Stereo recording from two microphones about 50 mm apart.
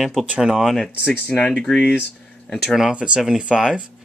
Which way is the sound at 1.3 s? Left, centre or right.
Centre.